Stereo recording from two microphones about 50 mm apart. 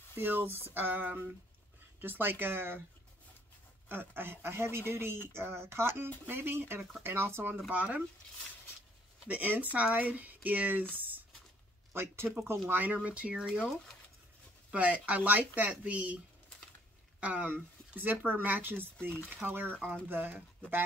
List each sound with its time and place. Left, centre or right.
0.1 s speech: right
3.9 s speech: right
7.7 s speech: right
9.3 s speech: right
11.0 s a sound: right
11.9 s speech: right
12.6 s speech: right
14.7 s speech: right
17.2 s speech: right